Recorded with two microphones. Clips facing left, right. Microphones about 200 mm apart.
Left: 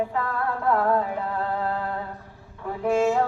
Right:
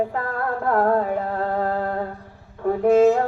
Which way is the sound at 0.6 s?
45° right (ahead or behind).